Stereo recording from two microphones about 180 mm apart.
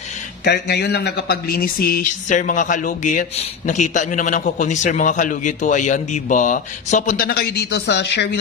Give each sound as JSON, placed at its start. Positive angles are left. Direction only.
{"t": 0.5, "sound": "speech", "side_deg": 65}